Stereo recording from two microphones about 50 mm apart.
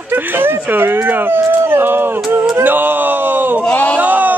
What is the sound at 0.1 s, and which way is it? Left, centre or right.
Speech, right.